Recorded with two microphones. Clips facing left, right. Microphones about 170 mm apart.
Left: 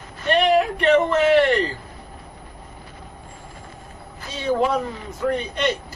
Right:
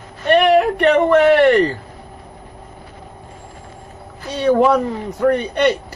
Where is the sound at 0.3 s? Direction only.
60° right (ahead or behind).